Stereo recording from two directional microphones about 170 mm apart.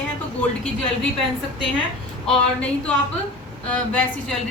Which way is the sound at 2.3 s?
5° left (ahead or behind).